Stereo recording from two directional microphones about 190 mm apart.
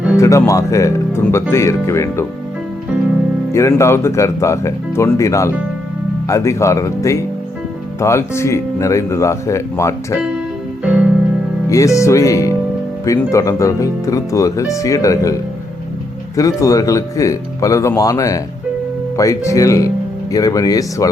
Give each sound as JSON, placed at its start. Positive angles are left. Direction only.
{"t": 0.2, "sound": "speech", "side_deg": 15}
{"t": 3.5, "sound": "speech", "side_deg": 15}
{"t": 10.8, "sound": "music", "side_deg": -5}
{"t": 11.7, "sound": "speech", "side_deg": 15}